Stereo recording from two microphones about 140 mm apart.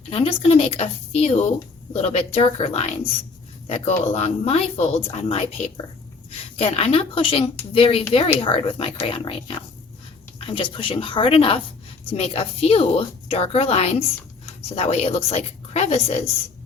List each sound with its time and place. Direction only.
0.1 s a woman's voice: 45° left (ahead or behind)